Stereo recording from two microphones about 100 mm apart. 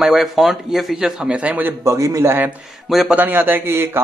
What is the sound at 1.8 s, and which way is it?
A man's voice, 30° right (ahead or behind).